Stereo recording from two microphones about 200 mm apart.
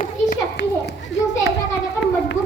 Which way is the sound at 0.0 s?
50° left (ahead or behind).